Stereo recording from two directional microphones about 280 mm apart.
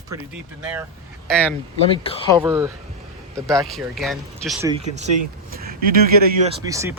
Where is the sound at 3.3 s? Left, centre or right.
Centre.